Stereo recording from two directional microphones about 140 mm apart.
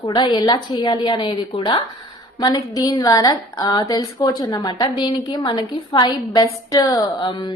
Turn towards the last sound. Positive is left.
turn(degrees=35)  # may be behind; listen again after turning